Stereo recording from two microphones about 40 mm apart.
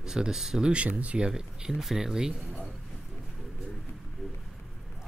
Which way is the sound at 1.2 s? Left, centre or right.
Centre.